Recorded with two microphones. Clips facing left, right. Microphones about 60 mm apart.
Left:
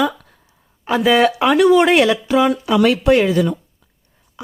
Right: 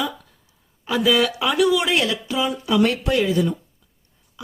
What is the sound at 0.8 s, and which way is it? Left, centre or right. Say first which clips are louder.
Speech: left 5 dB; left.